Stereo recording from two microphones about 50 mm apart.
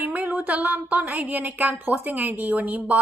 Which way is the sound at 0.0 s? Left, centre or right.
Right.